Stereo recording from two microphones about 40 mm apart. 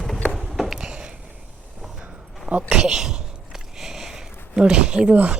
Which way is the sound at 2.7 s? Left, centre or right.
Centre.